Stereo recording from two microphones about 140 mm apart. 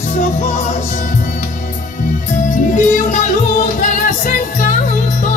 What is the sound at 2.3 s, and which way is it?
Music, 65° left (ahead or behind).